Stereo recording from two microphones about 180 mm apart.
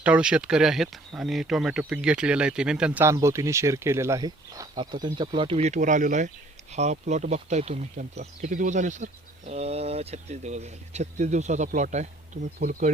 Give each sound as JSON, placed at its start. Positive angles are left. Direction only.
{"t": 0.0, "sound": "speech", "side_deg": -5}